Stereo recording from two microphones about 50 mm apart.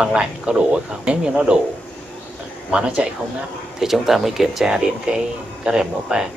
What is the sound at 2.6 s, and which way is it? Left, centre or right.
Speech, right.